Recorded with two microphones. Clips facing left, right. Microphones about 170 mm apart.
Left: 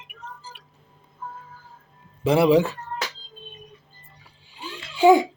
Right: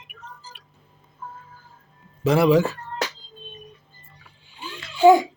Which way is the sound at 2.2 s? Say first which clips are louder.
Even; 30° left (ahead or behind).